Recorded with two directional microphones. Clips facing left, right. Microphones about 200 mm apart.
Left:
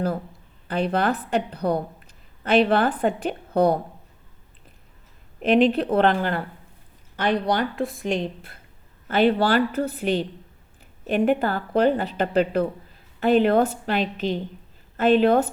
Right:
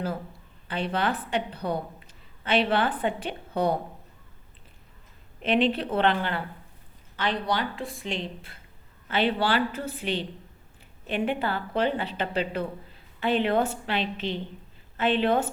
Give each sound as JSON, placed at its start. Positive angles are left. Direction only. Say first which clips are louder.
{"t": 0.7, "sound": "speech", "louder": "left 5 dB", "side_deg": 45}
{"t": 5.4, "sound": "speech", "louder": "left 6 dB", "side_deg": 45}
{"t": 7.5, "sound": "speech", "louder": "left 5 dB", "side_deg": 45}